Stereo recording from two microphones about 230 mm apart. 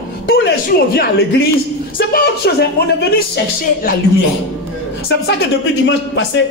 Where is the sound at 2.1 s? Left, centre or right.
Left.